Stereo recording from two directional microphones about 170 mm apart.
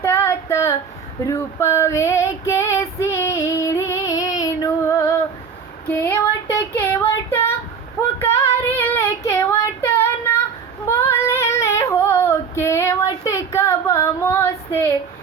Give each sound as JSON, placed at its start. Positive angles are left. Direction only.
{"t": 0.0, "sound": "female singing", "side_deg": 15}
{"t": 5.9, "sound": "a sound", "side_deg": 10}
{"t": 8.2, "sound": "female singing", "side_deg": 15}